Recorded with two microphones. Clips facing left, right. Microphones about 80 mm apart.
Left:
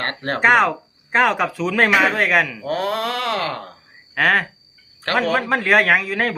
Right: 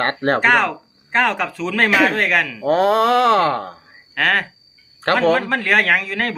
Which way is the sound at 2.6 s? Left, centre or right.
Right.